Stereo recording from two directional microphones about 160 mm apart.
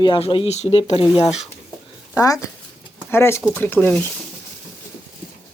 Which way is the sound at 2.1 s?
20° left (ahead or behind).